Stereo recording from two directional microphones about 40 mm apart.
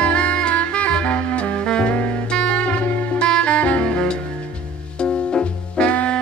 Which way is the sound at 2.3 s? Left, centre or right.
Left.